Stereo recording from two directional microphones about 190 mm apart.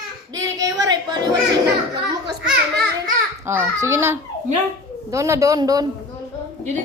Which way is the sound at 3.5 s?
15° right (ahead or behind).